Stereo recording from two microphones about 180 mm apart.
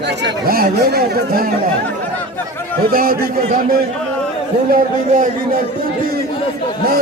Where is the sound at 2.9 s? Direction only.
55° right (ahead or behind).